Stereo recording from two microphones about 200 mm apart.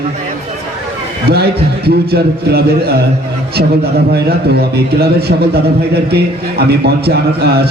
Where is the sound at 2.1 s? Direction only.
50° right (ahead or behind).